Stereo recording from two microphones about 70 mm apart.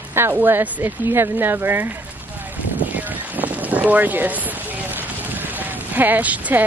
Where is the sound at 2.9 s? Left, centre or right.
Right.